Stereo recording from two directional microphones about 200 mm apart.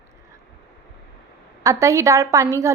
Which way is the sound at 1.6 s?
15° right (ahead or behind).